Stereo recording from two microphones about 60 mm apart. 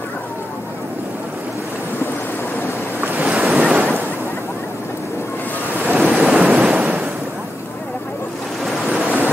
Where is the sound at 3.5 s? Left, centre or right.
Centre.